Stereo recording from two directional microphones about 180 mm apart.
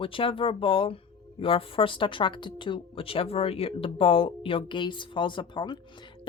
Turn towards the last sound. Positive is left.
turn(degrees=25)  # may be behind; listen again after turning